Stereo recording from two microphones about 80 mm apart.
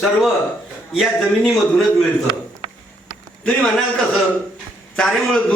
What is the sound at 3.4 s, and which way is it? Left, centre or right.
A man's voice, centre.